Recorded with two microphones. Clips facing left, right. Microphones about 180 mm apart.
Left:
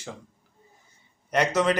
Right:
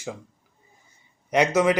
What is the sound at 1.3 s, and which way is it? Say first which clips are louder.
Speech: right 3 dB; 10° right (ahead or behind).